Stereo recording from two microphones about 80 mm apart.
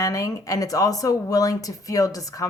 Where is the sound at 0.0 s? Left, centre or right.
Left.